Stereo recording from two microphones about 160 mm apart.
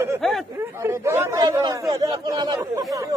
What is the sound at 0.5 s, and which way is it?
A man's voice, 15° right (ahead or behind).